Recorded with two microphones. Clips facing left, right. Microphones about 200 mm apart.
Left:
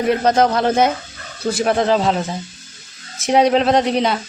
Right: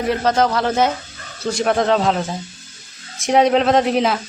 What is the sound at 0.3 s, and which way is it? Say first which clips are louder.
Speech: left 1 dB; 20° left (ahead or behind).